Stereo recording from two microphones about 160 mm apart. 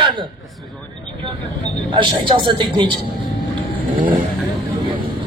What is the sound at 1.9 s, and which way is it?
Speech, 30° right (ahead or behind).